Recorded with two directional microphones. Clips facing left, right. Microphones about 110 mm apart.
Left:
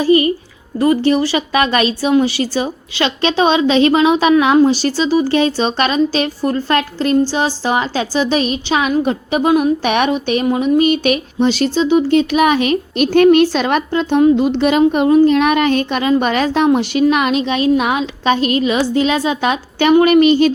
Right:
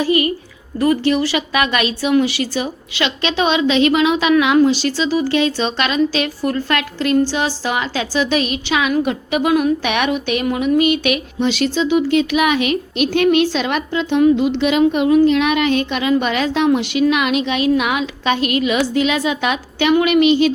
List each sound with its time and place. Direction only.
0.0 s speech: 30° left (ahead or behind)